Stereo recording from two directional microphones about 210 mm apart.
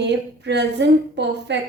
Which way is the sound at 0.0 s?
55° right (ahead or behind).